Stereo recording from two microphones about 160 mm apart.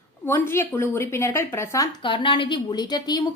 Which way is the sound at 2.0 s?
30° left (ahead or behind).